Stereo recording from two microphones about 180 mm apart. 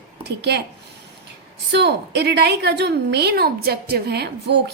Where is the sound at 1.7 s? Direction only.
70° right (ahead or behind).